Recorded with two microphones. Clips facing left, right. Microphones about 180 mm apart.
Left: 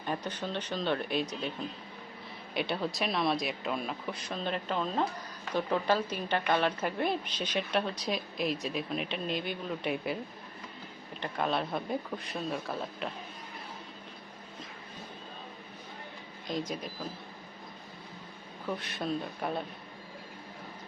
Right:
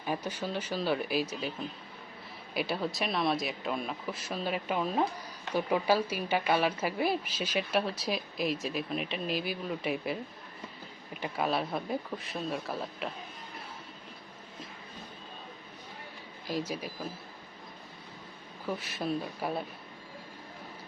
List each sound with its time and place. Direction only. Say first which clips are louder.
0.0 s speech: right 1 dB; 10° right (ahead or behind)
2.6 s a woman's voice: even; centre (ahead or behind)
11.2 s a woman's voice: right 1 dB; 5° right (ahead or behind)
16.5 s a woman's voice: right 1 dB; 5° right (ahead or behind)
18.7 s a woman's voice: right 1 dB; 5° right (ahead or behind)